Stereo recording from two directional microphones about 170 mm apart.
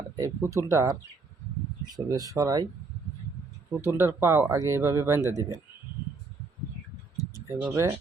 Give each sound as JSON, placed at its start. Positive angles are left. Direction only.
{"t": 0.2, "sound": "speech", "side_deg": -15}
{"t": 2.0, "sound": "speech", "side_deg": -20}
{"t": 3.8, "sound": "speech", "side_deg": -15}
{"t": 7.4, "sound": "speech", "side_deg": -15}